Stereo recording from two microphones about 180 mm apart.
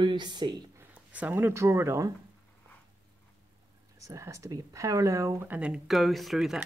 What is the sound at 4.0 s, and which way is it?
Speech, 15° right (ahead or behind).